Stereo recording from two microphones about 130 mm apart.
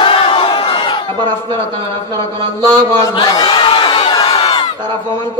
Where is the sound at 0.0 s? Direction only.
40° left (ahead or behind).